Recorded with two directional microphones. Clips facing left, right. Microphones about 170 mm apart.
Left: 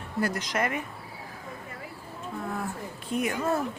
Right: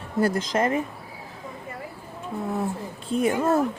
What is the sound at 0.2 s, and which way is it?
Speech, 30° right (ahead or behind).